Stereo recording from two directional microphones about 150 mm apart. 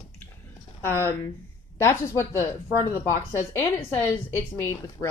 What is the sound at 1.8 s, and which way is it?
A woman's voice, 20° left (ahead or behind).